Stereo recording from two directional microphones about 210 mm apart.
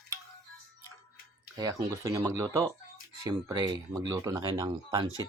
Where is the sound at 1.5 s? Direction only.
15° right (ahead or behind).